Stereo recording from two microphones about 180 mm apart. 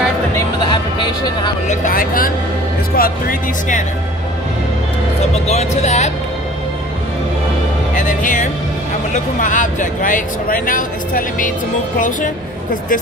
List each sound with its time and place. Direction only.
0.7 s speech: 25° left (ahead or behind)
1.7 s speech: 50° left (ahead or behind)
5.3 s speech: 35° left (ahead or behind)
7.9 s speech: 45° left (ahead or behind)